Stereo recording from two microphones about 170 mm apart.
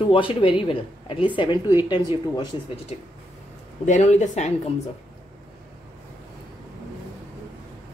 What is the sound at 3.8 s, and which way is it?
Speech, 45° left (ahead or behind).